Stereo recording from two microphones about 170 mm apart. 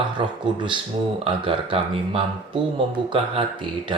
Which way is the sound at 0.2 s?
30° right (ahead or behind).